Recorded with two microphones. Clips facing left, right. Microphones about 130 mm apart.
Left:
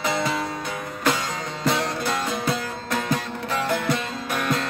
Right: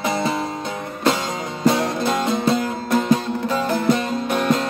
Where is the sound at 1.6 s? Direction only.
20° right (ahead or behind).